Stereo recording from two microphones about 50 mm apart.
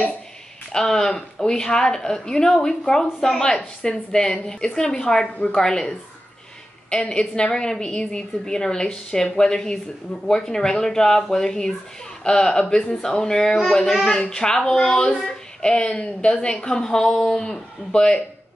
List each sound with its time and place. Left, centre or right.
0.7 s a woman's voice: centre